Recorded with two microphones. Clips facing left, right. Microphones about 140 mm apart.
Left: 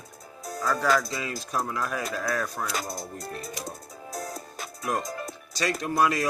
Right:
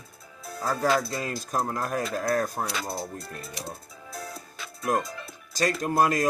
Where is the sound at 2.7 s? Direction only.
45° left (ahead or behind).